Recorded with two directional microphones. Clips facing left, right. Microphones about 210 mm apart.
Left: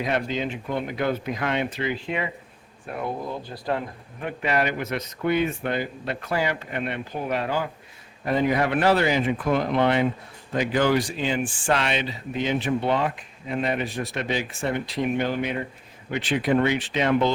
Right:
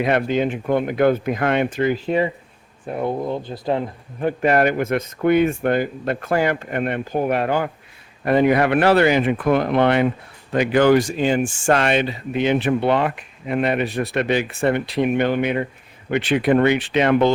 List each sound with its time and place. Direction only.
0.0 s speech: 60° right (ahead or behind); by 2.3 s 40° right (ahead or behind)
2.9 s speech: 25° right (ahead or behind)
4.3 s speech: 50° right (ahead or behind)